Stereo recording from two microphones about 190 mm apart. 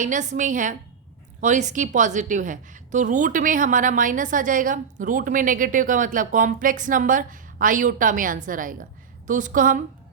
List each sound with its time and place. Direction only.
0.0 s a woman's voice: 40° right (ahead or behind)